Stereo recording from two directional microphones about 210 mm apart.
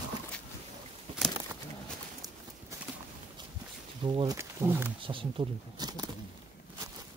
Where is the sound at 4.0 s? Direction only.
20° right (ahead or behind).